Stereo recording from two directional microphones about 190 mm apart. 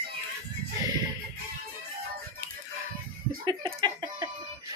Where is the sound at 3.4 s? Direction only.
25° right (ahead or behind).